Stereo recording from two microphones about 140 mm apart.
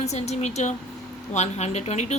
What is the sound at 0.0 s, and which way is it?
A woman's voice, 50° left (ahead or behind).